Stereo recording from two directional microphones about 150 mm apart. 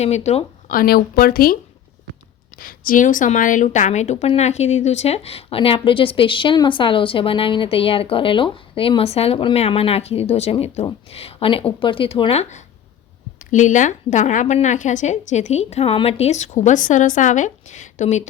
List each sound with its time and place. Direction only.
0.0 s a woman's voice: 45° left (ahead or behind)
0.7 s speech: 85° left
2.6 s a woman's voice: 75° left (ahead or behind); by 18.2 s 50° left (ahead or behind)